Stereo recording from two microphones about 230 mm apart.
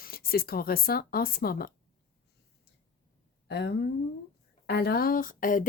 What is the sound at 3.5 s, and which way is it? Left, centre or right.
A woman's voice, left.